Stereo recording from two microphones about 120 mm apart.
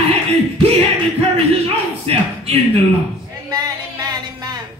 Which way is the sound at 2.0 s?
55° right (ahead or behind).